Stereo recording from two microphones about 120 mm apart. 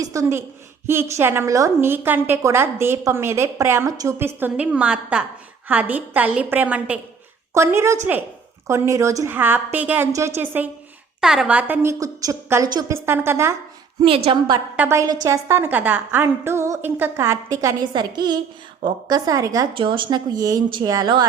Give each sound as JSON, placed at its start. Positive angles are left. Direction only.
{"t": 0.0, "sound": "a woman's voice", "side_deg": -25}
{"t": 7.5, "sound": "a woman's voice", "side_deg": -20}
{"t": 11.2, "sound": "a woman's voice", "side_deg": -5}
{"t": 14.0, "sound": "a woman's voice", "side_deg": -50}
{"t": 14.8, "sound": "a woman's voice", "side_deg": -20}
{"t": 19.7, "sound": "speech", "side_deg": -45}